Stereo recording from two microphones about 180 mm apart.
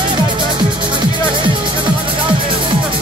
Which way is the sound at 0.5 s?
25° right (ahead or behind).